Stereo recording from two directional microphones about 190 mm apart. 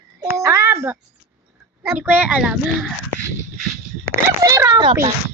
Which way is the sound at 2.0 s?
5° right (ahead or behind).